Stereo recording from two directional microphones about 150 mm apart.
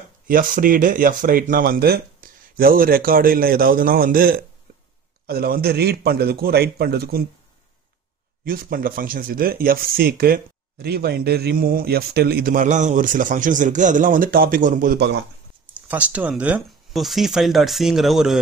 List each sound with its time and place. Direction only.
0.3 s speech: 65° right (ahead or behind)
5.2 s a man's voice: 90° right
8.5 s speech: 70° right (ahead or behind)
15.9 s speech: 10° right (ahead or behind)